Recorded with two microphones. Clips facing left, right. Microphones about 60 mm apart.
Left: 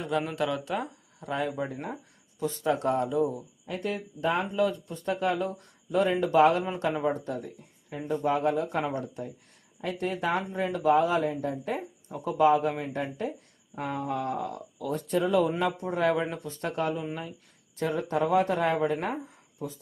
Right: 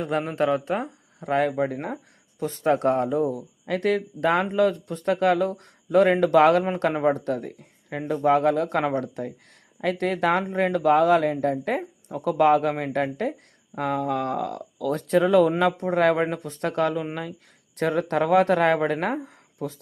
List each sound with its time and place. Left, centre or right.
0.0 s speech: right
1.3 s speech: right
2.4 s speech: right
3.7 s speech: right
11.8 s speech: right
14.8 s speech: right
15.8 s speech: right